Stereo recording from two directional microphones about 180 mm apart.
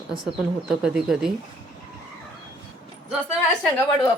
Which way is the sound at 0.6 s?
5° right (ahead or behind).